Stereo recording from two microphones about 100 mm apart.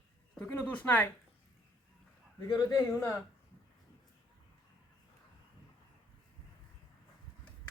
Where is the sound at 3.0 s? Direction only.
25° left (ahead or behind).